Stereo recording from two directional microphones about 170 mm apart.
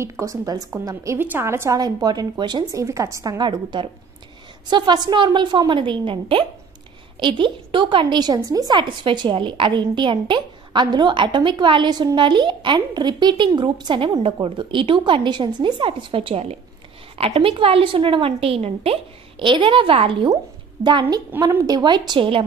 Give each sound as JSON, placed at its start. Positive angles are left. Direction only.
{"t": 0.0, "sound": "a woman's voice", "side_deg": -20}